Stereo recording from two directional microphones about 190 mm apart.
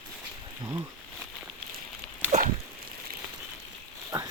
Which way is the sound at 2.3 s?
40° right (ahead or behind).